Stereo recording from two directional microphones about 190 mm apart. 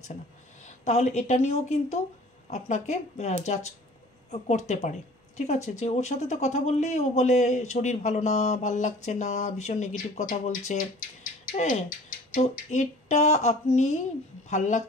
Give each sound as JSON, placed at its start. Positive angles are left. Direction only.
{"t": 0.7, "sound": "speech", "side_deg": 35}